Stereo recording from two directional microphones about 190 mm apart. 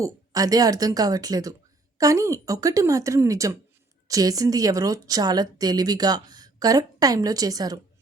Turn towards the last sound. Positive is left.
turn(degrees=-20)  # may be behind; listen again after turning